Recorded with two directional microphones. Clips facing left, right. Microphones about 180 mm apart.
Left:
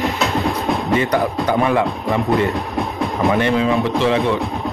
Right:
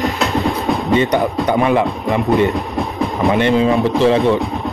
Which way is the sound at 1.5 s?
15° right (ahead or behind).